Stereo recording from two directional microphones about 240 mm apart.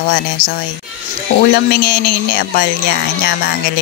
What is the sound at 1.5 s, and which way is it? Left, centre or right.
Speech, left.